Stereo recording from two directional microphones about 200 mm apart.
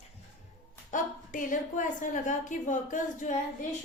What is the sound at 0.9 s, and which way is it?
A woman's voice, 40° left (ahead or behind).